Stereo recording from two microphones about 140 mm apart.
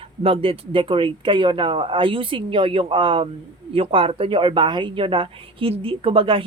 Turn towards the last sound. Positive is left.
turn(degrees=-40)  # may be behind; listen again after turning